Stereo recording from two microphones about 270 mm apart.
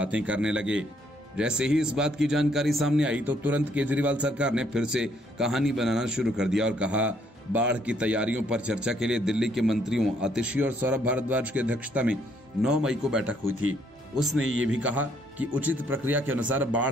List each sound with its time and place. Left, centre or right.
0.0 s a man's voice: centre
14.3 s speech: right
14.7 s a man's voice: centre